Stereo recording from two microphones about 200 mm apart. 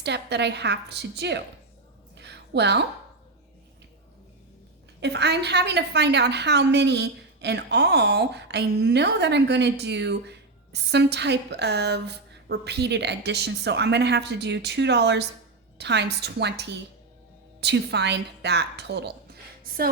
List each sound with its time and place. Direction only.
0.0 s a woman's voice: 55° right (ahead or behind)
2.1 s a sound: 60° right (ahead or behind)
4.9 s a woman's voice: 60° right (ahead or behind)